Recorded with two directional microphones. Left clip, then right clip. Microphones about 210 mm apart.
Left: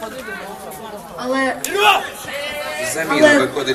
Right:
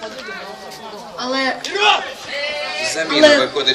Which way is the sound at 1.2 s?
40° right (ahead or behind).